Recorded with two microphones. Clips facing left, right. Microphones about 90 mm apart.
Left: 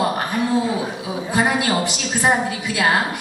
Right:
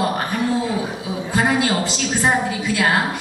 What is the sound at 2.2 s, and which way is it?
Speech, 15° left (ahead or behind).